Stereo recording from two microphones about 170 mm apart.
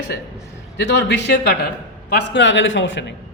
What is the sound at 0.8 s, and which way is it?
A man's voice, 85° left.